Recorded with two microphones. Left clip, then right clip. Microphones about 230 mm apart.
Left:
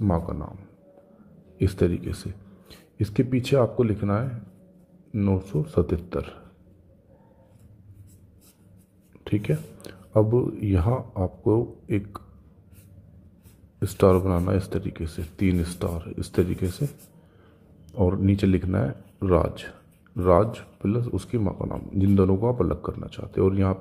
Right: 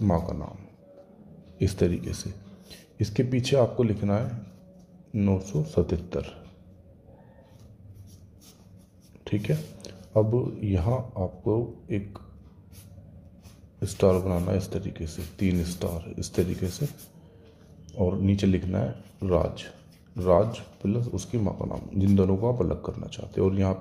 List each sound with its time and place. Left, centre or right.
0.0 s speech: centre
1.6 s speech: centre
9.2 s speech: centre
13.9 s speech: left
17.9 s speech: centre